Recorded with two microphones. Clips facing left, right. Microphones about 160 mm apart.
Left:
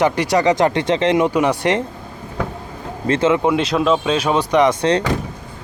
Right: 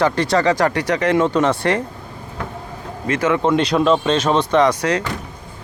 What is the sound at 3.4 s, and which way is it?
Speech, 5° left (ahead or behind).